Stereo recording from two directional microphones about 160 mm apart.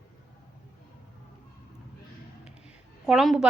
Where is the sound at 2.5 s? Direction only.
5° right (ahead or behind).